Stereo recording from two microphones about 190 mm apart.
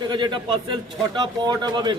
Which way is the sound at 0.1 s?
25° right (ahead or behind).